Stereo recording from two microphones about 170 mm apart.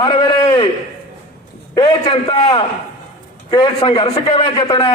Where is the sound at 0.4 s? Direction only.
35° left (ahead or behind).